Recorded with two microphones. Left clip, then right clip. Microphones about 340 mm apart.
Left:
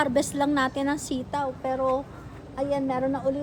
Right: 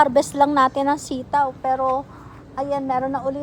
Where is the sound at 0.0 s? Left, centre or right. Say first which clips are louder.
Right 8 dB; centre.